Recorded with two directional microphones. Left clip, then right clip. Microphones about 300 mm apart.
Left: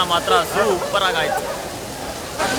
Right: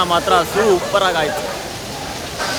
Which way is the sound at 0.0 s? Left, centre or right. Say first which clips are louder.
Right 2 dB; centre.